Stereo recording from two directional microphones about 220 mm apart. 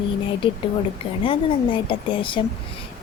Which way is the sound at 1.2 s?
25° left (ahead or behind).